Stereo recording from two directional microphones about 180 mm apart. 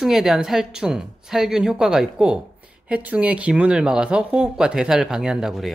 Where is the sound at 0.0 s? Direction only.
Centre (ahead or behind).